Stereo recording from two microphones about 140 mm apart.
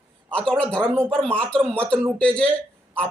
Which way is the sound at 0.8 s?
15° right (ahead or behind).